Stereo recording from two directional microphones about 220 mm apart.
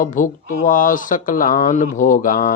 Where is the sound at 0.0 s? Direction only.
35° left (ahead or behind).